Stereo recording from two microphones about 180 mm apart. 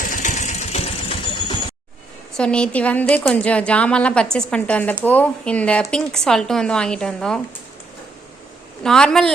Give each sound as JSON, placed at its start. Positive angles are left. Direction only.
{"t": 0.0, "sound": "engine", "side_deg": 45}
{"t": 2.3, "sound": "a woman's voice", "side_deg": 5}
{"t": 8.8, "sound": "a woman's voice", "side_deg": 5}